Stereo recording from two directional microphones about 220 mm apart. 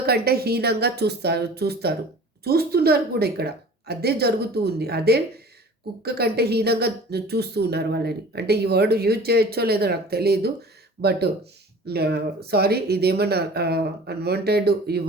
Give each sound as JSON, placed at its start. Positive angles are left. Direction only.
{"t": 0.0, "sound": "a woman's voice", "side_deg": -45}